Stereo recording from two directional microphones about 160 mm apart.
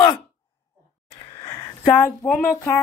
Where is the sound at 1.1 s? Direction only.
25° left (ahead or behind).